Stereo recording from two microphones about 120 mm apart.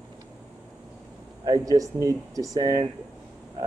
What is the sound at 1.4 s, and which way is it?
Speech, 30° right (ahead or behind).